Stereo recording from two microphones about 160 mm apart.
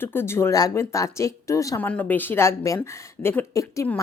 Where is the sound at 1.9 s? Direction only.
10° left (ahead or behind).